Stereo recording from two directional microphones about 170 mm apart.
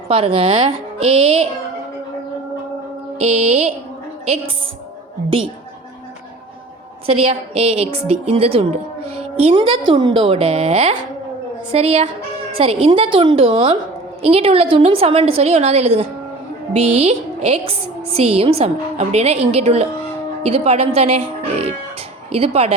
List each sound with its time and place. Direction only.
0.1 s a woman's voice: 30° right (ahead or behind)
3.2 s a woman's voice: 40° right (ahead or behind)
7.1 s a woman's voice: 35° right (ahead or behind)